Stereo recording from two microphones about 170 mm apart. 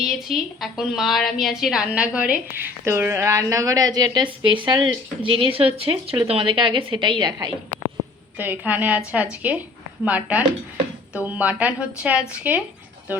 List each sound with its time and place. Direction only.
0.3 s a woman's voice: centre (ahead or behind); by 7.5 s 25° right (ahead or behind)
8.4 s a woman's voice: 10° right (ahead or behind)